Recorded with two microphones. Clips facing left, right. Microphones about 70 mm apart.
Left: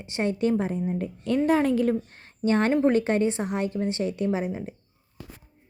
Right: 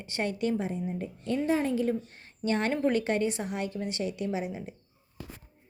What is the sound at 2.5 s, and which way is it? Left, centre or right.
A woman's voice, left.